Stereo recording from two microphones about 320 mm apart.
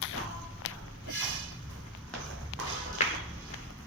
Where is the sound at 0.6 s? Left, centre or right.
Left.